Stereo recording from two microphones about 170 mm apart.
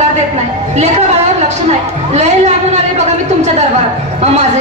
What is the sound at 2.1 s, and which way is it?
Speech, 40° right (ahead or behind).